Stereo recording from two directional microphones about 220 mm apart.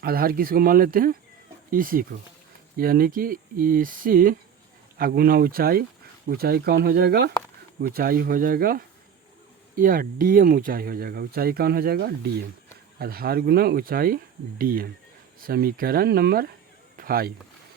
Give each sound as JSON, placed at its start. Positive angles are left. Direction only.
{"t": 0.0, "sound": "speech", "side_deg": -40}